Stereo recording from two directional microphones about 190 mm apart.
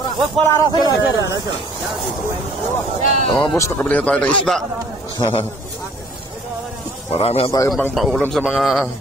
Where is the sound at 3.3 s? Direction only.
20° left (ahead or behind); by 4.6 s 5° left (ahead or behind).